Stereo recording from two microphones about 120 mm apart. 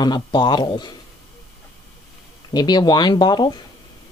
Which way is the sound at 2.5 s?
35° left (ahead or behind).